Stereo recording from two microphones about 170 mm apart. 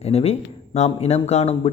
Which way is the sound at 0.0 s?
35° left (ahead or behind).